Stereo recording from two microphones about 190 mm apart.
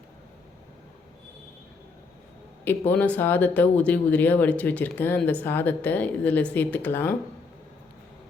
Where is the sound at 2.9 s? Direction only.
10° left (ahead or behind).